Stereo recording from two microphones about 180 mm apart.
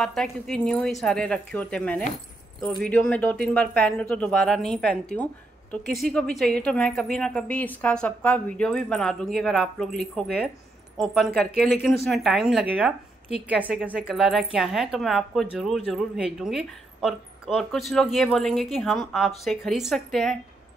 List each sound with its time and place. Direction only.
0.0 s a woman's voice: 5° left (ahead or behind)